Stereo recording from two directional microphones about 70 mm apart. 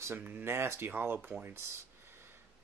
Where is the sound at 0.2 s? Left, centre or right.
Right.